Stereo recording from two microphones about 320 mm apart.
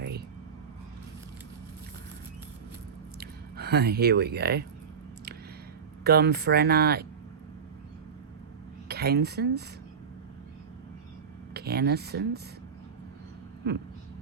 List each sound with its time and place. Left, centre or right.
3.2 s speech: right
6.1 s speech: right
8.9 s speech: right
11.5 s speech: right